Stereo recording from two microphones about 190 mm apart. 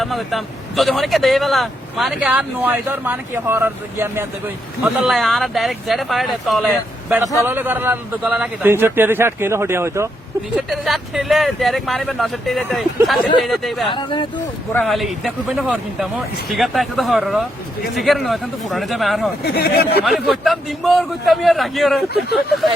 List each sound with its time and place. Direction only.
0.0 s speech: centre (ahead or behind)
4.8 s speech: centre (ahead or behind)
7.4 s a man's voice: 10° right (ahead or behind)
10.7 s speech: centre (ahead or behind)
13.8 s speech: 25° left (ahead or behind)
14.7 s speech: 5° left (ahead or behind)
19.5 s speech: 55° left (ahead or behind)
20.1 s speech: centre (ahead or behind)